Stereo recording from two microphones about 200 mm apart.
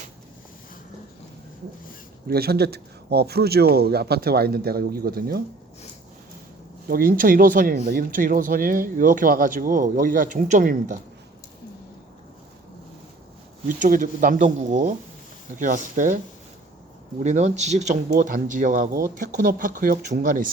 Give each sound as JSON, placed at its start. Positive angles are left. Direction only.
{"t": 2.2, "sound": "speech", "side_deg": -50}
{"t": 6.8, "sound": "speech", "side_deg": -45}
{"t": 13.7, "sound": "speech", "side_deg": -40}
{"t": 17.2, "sound": "speech", "side_deg": -35}